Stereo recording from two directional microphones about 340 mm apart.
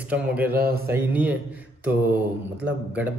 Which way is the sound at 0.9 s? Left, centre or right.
Centre.